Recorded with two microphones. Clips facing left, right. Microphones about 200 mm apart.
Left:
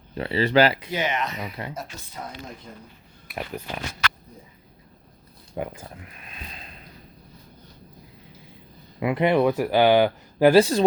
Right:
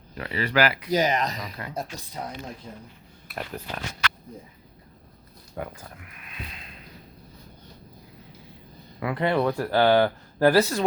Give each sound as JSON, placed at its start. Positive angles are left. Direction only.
{"t": 0.1, "sound": "speech", "side_deg": 30}
{"t": 0.9, "sound": "speech", "side_deg": -40}
{"t": 3.3, "sound": "speech", "side_deg": 10}
{"t": 5.5, "sound": "speech", "side_deg": 25}
{"t": 9.0, "sound": "speech", "side_deg": 20}